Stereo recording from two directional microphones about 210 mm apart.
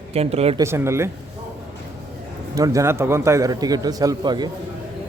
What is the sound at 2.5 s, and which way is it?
Speech, 15° right (ahead or behind).